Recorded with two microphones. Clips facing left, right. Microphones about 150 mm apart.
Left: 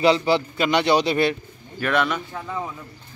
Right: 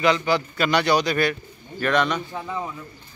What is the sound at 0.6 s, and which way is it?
Speech, 20° left (ahead or behind).